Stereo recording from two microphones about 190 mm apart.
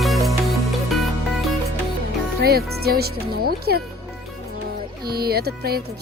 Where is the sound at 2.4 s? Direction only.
55° right (ahead or behind).